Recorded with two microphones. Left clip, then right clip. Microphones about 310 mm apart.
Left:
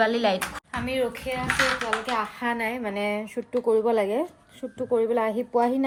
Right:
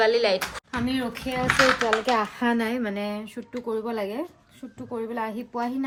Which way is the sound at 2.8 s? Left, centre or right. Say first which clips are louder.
Left 2 dB; left.